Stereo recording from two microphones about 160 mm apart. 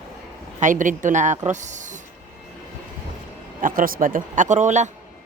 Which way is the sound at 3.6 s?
55° right (ahead or behind).